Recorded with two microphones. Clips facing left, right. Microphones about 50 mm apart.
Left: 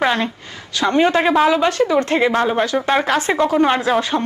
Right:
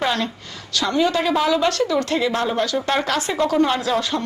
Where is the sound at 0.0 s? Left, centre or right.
Left.